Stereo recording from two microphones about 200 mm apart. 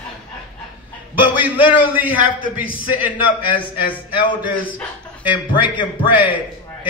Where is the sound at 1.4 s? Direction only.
10° right (ahead or behind).